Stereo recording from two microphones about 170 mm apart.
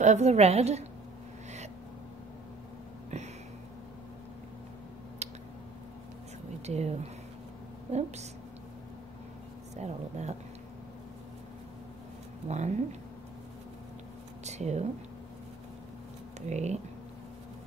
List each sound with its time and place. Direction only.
0.0 s a woman's voice: 40° right (ahead or behind)
5.2 s a sound: 40° right (ahead or behind)
6.6 s a woman's voice: 40° right (ahead or behind)
9.8 s a woman's voice: 40° right (ahead or behind)
12.4 s speech: 40° right (ahead or behind)
14.4 s speech: 40° right (ahead or behind)
16.3 s speech: 40° right (ahead or behind)